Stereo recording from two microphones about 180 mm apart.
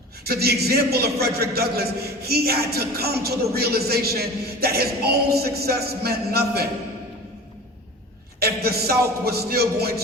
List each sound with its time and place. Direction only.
0.3 s a man's voice: 60° right (ahead or behind)
8.4 s a sound: 60° right (ahead or behind)
9.0 s a man's voice: 60° right (ahead or behind)